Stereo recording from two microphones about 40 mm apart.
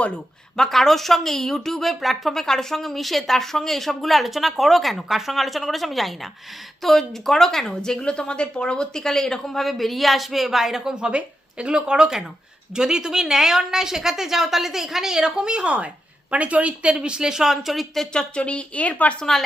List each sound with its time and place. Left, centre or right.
0.5 s speech: centre
11.0 s a woman's voice: right
16.9 s a woman's voice: right; by 17.8 s centre
18.1 s a woman's voice: left